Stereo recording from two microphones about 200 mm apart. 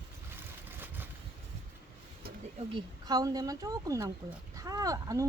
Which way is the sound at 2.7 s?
20° right (ahead or behind).